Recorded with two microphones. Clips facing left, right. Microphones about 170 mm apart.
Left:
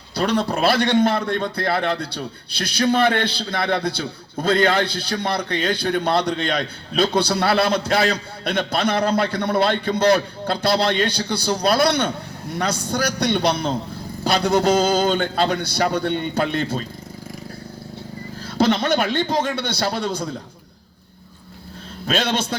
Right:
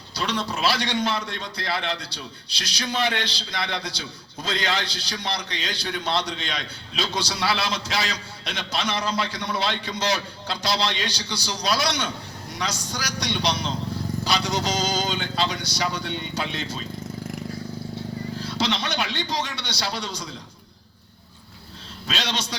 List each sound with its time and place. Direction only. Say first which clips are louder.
0.1 s a man's voice: left 7 dB; 55° left (ahead or behind)
18.3 s a man's voice: left 9 dB; 50° left (ahead or behind)
22.0 s a man's voice: left 8 dB; 50° left (ahead or behind)